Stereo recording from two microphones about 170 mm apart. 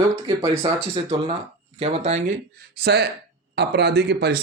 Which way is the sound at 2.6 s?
70° right (ahead or behind).